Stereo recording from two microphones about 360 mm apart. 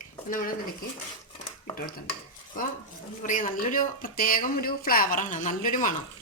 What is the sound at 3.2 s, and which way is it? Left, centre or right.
A woman's voice, left.